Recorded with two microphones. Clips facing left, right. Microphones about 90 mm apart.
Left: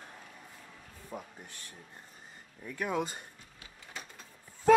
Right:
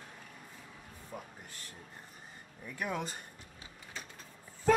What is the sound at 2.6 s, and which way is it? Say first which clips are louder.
Speech: left 2 dB; 5° right (ahead or behind).